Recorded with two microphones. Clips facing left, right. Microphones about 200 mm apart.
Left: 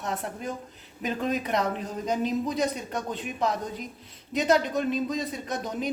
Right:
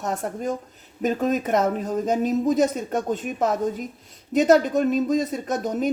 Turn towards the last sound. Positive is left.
turn(degrees=-45)  # may be behind; listen again after turning